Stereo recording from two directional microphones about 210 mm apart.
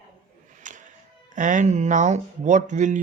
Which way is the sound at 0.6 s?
35° right (ahead or behind).